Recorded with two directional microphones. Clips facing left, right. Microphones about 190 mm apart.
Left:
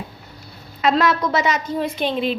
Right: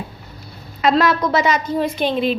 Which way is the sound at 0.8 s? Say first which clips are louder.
Right 2 dB; 40° right (ahead or behind).